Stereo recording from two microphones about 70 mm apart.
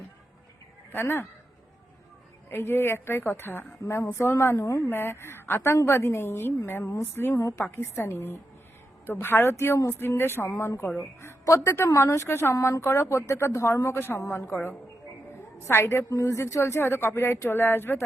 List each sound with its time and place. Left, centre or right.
0.9 s speech: left
2.5 s speech: left
3.8 s a woman's voice: left
4.9 s speech: left
5.7 s a woman's voice: left
7.6 s a woman's voice: left
14.4 s a woman's voice: left
15.6 s speech: left